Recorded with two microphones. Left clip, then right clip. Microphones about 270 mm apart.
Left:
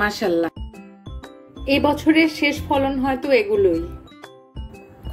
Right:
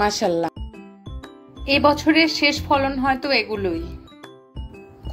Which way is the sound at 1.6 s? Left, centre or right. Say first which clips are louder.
Right 1 dB; right.